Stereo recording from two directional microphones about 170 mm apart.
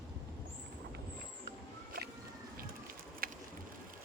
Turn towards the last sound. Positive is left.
turn(degrees=-60)  # may be behind; listen again after turning